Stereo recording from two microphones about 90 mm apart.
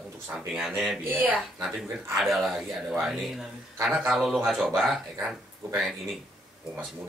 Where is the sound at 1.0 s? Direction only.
20° right (ahead or behind).